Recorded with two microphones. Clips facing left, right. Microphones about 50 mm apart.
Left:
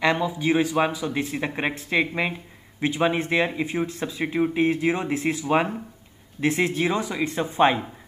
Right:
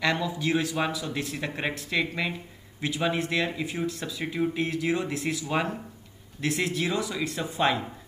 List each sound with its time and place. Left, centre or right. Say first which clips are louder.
0.0 s speech: left 4 dB; left